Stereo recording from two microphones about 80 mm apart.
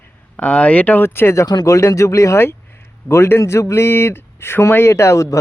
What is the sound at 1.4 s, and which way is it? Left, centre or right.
A man's voice, left.